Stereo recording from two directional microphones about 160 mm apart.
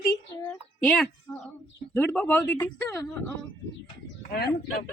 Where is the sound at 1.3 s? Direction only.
Centre (ahead or behind).